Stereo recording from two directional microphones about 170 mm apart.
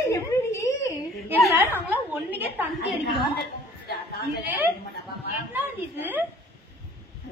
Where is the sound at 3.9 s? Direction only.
70° left (ahead or behind).